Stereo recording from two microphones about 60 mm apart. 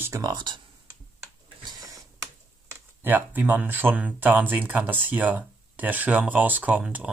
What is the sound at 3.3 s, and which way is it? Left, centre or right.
Speech, right.